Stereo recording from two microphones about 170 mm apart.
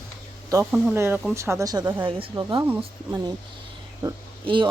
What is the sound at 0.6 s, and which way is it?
Speech, 5° right (ahead or behind).